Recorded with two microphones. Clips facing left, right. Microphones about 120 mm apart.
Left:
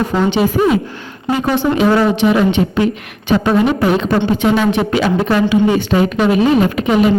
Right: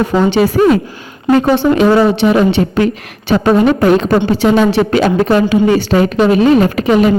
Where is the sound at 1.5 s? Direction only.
30° right (ahead or behind).